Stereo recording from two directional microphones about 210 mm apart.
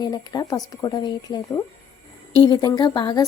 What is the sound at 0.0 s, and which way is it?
Speech, 20° left (ahead or behind).